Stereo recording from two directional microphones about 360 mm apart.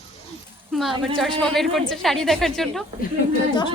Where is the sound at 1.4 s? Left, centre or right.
Centre.